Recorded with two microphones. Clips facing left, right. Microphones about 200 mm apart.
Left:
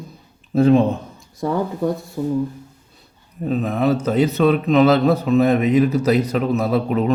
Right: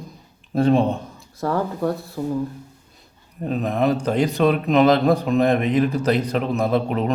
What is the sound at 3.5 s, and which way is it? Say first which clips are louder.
A man's voice: left 2 dB; centre (ahead or behind).